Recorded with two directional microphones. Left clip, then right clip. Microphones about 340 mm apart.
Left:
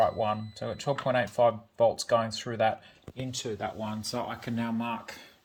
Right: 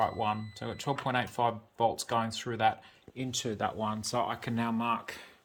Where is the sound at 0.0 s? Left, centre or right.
Right.